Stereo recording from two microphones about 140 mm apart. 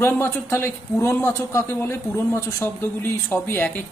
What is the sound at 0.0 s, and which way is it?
A man's voice, 15° left (ahead or behind).